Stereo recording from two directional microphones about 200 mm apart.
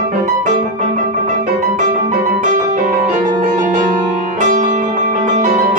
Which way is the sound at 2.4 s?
40° right (ahead or behind).